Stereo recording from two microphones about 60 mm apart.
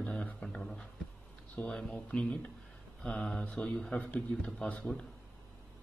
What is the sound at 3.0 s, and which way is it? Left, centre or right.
Mantra, centre.